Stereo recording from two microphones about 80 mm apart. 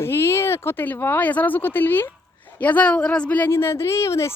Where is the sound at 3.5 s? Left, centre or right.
Left.